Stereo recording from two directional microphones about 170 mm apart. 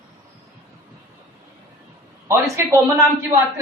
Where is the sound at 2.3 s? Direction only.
15° right (ahead or behind).